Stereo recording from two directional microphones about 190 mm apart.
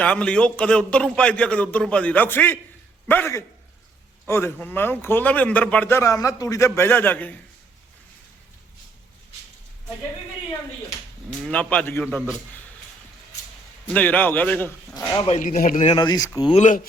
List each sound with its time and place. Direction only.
0.0 s a man's voice: 5° left (ahead or behind)
11.4 s speech: 5° left (ahead or behind)
13.9 s speech: 10° left (ahead or behind)
14.9 s speech: 20° left (ahead or behind)
15.3 s speech: 40° left (ahead or behind)
15.8 s speech: 25° left (ahead or behind)
16.6 s speech: 40° left (ahead or behind)